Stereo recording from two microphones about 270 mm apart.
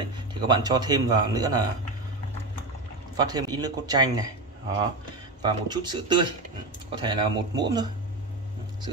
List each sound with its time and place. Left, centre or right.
0.0 s speech: centre
3.2 s speech: centre
5.4 s speech: centre